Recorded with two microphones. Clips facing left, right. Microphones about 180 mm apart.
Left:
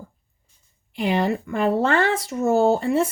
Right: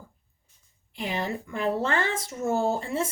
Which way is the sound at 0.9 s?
70° left (ahead or behind).